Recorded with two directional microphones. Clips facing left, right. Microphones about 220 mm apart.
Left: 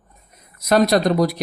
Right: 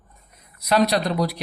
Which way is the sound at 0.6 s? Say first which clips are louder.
Left 4 dB; 45° left (ahead or behind).